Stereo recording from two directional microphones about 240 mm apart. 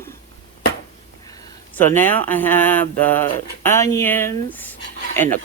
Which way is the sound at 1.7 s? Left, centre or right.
Centre.